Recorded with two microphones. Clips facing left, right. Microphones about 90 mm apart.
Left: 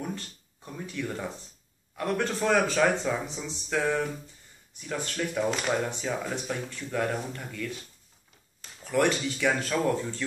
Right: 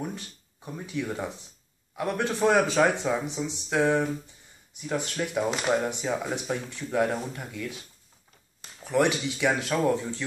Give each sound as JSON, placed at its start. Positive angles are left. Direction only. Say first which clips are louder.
{"t": 0.8, "sound": "speech", "louder": "right 2 dB", "side_deg": -15}